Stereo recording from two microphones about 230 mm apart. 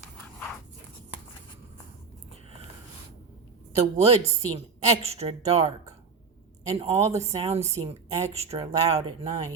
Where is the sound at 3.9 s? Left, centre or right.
Right.